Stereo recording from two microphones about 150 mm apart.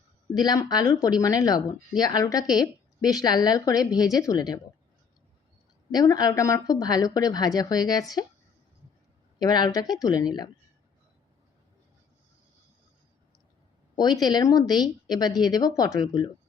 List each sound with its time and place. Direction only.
0.3 s a woman's voice: 25° left (ahead or behind)
5.9 s a woman's voice: 25° left (ahead or behind)
9.4 s a woman's voice: 30° left (ahead or behind)
13.9 s a woman's voice: 30° left (ahead or behind)